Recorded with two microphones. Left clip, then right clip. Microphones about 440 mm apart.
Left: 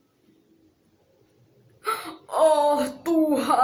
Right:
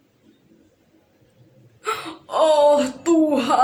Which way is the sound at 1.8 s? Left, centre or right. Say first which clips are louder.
Right 2 dB; left.